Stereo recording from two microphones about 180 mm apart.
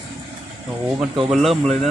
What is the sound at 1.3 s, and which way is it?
Speech, centre (ahead or behind).